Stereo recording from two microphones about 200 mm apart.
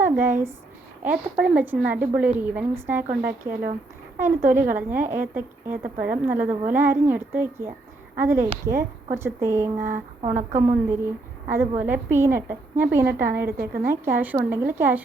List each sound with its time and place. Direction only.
0.0 s a woman's voice: 10° right (ahead or behind)
10.2 s a woman's voice: 40° right (ahead or behind)
10.8 s a woman's voice: 10° right (ahead or behind)